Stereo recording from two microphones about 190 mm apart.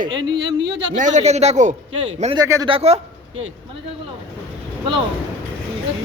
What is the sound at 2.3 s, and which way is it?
Speech, 20° right (ahead or behind).